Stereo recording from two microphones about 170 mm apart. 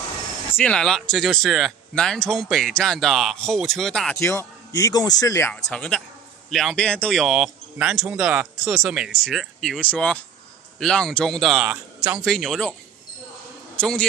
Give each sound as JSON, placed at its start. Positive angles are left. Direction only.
{"t": 0.5, "sound": "speech", "side_deg": 10}
{"t": 4.2, "sound": "a man's voice", "side_deg": 15}
{"t": 5.5, "sound": "speech", "side_deg": 5}
{"t": 12.3, "sound": "speech", "side_deg": 0}
{"t": 13.7, "sound": "a man's voice", "side_deg": 5}